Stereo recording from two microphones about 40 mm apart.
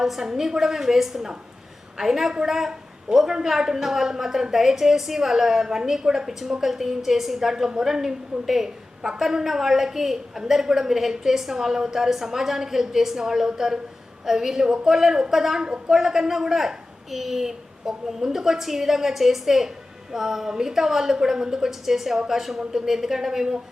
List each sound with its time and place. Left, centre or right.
0.0 s a woman's voice: centre